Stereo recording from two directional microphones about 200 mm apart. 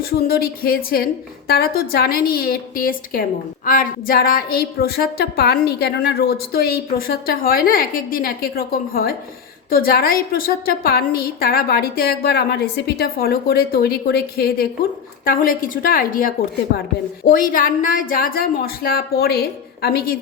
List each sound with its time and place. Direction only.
0.1 s a woman's voice: 50° left (ahead or behind)